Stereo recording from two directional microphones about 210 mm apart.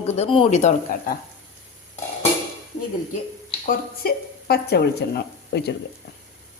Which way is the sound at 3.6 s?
45° left (ahead or behind).